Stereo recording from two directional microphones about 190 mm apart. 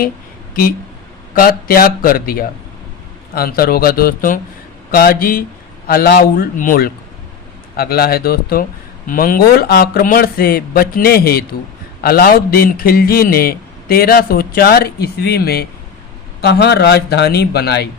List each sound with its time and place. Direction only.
1.3 s a man's voice: 50° left (ahead or behind)